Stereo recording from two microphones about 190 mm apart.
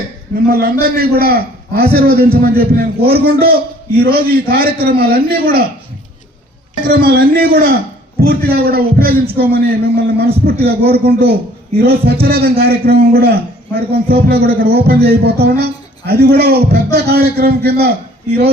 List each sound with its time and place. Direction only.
0.4 s a man's voice: 55° right (ahead or behind)
6.8 s a man's voice: 50° right (ahead or behind)